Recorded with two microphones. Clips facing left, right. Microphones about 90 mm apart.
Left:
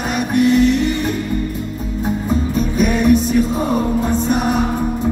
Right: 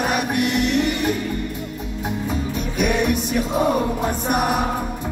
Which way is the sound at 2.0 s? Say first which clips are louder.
Left 6 dB; 35° left (ahead or behind).